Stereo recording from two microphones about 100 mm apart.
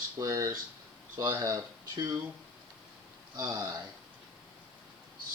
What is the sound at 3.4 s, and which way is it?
Speech, 35° right (ahead or behind).